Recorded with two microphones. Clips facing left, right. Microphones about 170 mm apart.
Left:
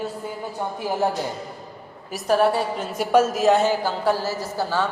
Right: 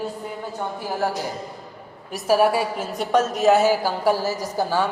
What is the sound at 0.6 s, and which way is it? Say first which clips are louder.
Speech: left 2 dB; 15° left (ahead or behind).